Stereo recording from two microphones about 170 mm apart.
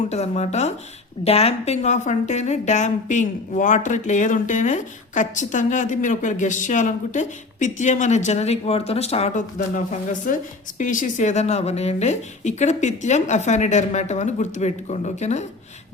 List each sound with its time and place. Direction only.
0.1 s speech: 40° left (ahead or behind)